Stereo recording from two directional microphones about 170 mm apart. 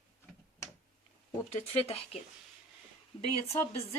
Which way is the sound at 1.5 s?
35° left (ahead or behind).